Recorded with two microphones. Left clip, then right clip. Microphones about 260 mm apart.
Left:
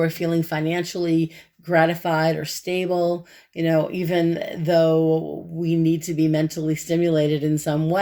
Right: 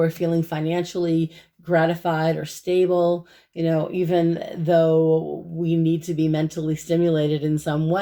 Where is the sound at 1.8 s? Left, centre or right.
Left.